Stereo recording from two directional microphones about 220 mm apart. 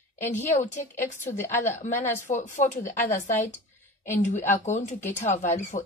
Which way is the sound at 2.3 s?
35° left (ahead or behind).